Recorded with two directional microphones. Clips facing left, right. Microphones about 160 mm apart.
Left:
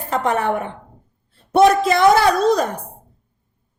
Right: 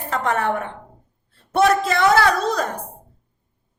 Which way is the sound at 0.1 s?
20° left (ahead or behind).